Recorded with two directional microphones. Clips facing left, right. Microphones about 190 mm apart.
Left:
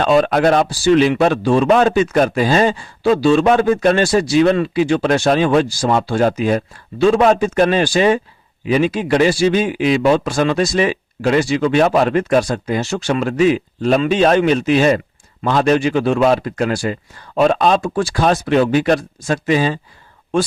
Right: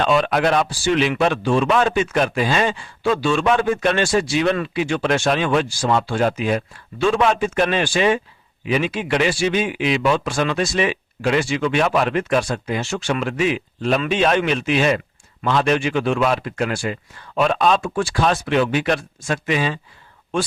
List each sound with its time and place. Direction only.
0.0 s speech: 40° left (ahead or behind)